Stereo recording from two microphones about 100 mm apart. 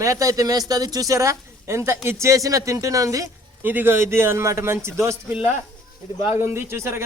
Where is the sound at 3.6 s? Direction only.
20° right (ahead or behind).